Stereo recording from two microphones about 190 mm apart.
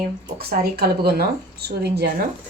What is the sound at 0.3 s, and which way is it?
Speech, 55° right (ahead or behind).